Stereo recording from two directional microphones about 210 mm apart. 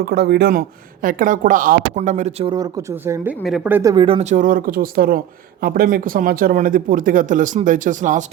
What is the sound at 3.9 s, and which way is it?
Speech, 25° right (ahead or behind).